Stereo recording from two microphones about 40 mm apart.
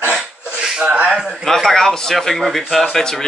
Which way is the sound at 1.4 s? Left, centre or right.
Centre.